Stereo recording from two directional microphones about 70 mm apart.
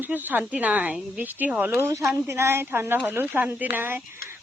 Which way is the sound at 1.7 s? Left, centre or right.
Right.